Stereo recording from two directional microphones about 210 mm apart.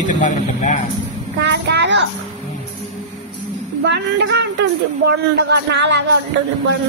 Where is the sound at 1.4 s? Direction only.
55° right (ahead or behind).